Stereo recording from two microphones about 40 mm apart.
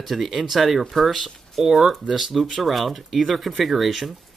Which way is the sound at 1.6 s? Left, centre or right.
Centre.